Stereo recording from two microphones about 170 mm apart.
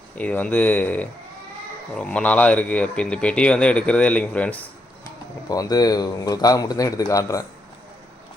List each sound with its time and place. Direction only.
0.2 s speech: 10° left (ahead or behind)
5.0 s speech: 20° left (ahead or behind)